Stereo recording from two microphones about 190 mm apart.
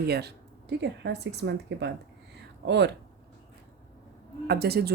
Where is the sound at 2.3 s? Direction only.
65° right (ahead or behind).